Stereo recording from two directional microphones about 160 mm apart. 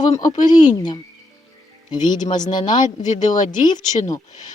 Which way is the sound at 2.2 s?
25° left (ahead or behind).